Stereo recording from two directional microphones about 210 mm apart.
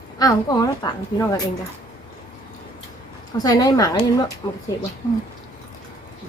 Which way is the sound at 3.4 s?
20° left (ahead or behind).